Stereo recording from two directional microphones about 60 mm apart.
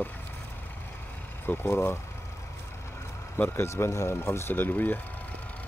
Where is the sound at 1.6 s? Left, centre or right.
Left.